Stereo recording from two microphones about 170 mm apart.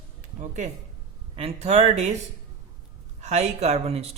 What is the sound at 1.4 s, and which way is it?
Speech, 35° right (ahead or behind).